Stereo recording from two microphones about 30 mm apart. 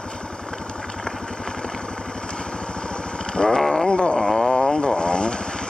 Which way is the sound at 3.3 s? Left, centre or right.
Left.